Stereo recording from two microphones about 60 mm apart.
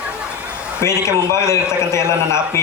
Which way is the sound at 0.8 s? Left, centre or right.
Left.